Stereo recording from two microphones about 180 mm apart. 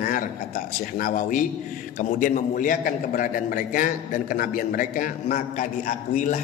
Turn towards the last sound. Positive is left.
turn(degrees=40)  # may be behind; listen again after turning